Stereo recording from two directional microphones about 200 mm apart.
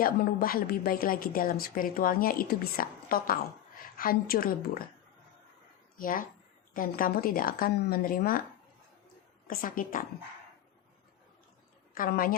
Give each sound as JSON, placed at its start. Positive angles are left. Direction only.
{"t": 0.0, "sound": "a woman's voice", "side_deg": 45}
{"t": 6.0, "sound": "a woman's voice", "side_deg": 45}
{"t": 9.5, "sound": "a woman's voice", "side_deg": 45}
{"t": 11.9, "sound": "a woman's voice", "side_deg": 45}